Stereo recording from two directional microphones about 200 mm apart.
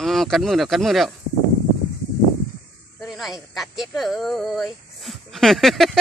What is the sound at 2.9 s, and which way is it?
Speech, centre (ahead or behind).